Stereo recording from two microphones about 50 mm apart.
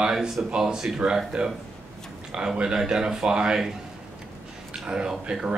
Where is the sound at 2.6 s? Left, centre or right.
Centre.